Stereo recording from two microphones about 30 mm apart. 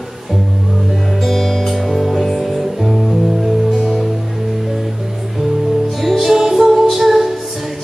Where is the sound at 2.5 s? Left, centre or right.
Centre.